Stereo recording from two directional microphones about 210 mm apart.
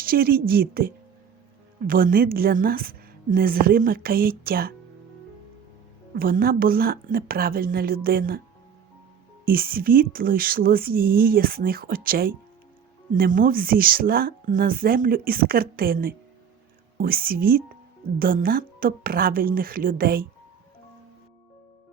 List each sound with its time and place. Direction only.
0.0 s speech: 45° right (ahead or behind)
6.1 s speech: 45° right (ahead or behind)
9.5 s speech: 45° right (ahead or behind)